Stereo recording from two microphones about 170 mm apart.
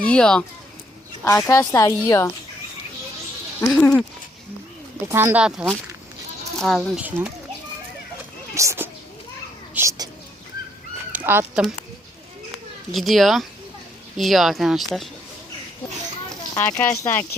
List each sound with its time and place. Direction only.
0.0 s speech: 5° left (ahead or behind)
1.2 s speech: 15° left (ahead or behind)
5.0 s speech: 15° right (ahead or behind)
8.5 s speech: 15° right (ahead or behind)
9.7 s a sound: 15° right (ahead or behind)
11.1 s speech: 10° right (ahead or behind)
12.9 s speech: centre (ahead or behind)
16.6 s speech: 15° left (ahead or behind)